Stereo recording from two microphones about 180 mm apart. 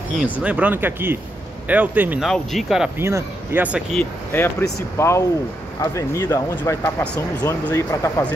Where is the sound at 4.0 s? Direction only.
10° left (ahead or behind).